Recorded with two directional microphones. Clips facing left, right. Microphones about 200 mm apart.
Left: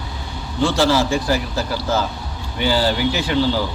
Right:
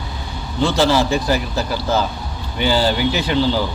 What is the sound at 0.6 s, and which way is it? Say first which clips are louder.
A man's voice: right 1 dB; 20° right (ahead or behind).